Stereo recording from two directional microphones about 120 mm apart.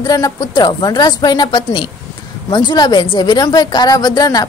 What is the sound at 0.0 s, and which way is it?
A woman's voice, 30° left (ahead or behind).